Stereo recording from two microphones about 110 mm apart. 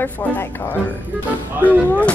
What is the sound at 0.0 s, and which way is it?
Speech, 15° left (ahead or behind).